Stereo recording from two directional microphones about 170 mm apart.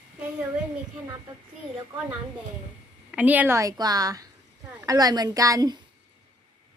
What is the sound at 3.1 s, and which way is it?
A woman's voice, 10° right (ahead or behind).